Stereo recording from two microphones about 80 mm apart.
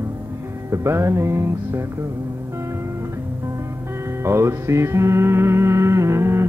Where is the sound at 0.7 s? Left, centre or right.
Right.